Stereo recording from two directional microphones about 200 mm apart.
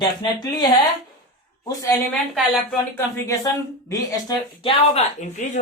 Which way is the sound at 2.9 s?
15° left (ahead or behind).